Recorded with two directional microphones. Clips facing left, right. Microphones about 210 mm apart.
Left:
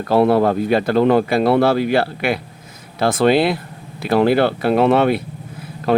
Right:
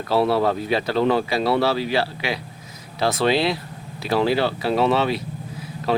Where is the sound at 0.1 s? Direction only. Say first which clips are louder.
Left 5 dB; 50° left (ahead or behind).